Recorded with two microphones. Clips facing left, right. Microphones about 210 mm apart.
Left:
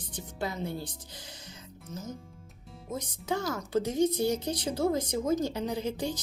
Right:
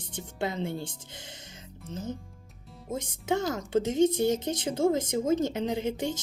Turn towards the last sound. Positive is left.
turn(degrees=-20)  # may be behind; listen again after turning